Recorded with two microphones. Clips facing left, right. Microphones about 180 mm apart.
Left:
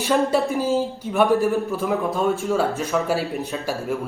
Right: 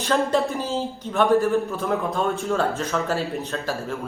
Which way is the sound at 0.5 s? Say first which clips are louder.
Left 5 dB; 15° left (ahead or behind).